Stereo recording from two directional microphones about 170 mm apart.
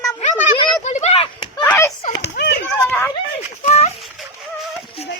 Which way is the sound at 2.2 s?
80° left.